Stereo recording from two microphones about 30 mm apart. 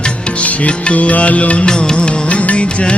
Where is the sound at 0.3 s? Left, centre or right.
Left.